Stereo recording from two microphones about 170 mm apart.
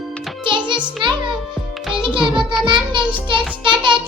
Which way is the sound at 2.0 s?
30° right (ahead or behind).